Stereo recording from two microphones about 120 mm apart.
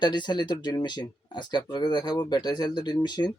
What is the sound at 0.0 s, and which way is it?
Speech, 40° left (ahead or behind).